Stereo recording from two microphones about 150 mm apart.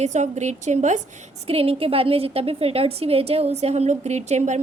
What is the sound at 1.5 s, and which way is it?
A woman's voice, 40° right (ahead or behind).